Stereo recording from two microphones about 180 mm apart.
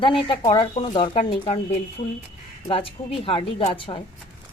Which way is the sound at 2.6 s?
30° left (ahead or behind).